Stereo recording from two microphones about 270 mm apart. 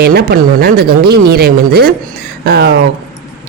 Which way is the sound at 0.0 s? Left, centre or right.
Right.